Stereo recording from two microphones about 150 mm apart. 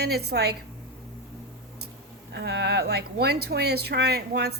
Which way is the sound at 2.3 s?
90° right.